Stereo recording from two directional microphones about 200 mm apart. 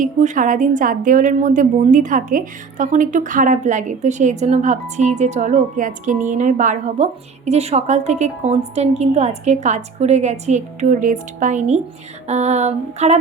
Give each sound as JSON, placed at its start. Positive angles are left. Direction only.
{"t": 0.0, "sound": "a woman's voice", "side_deg": -40}